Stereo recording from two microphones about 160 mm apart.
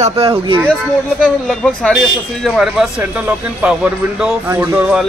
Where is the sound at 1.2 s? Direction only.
5° left (ahead or behind).